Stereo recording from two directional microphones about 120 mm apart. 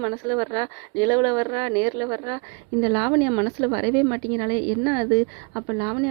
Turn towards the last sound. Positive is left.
turn(degrees=-30)  # may be behind; listen again after turning